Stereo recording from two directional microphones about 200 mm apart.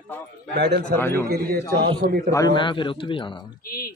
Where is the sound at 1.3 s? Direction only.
45° right (ahead or behind).